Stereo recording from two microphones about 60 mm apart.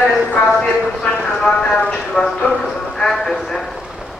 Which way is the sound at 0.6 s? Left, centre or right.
Centre.